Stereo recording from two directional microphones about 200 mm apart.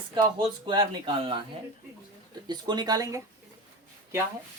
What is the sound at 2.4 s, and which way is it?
Speech, 20° right (ahead or behind).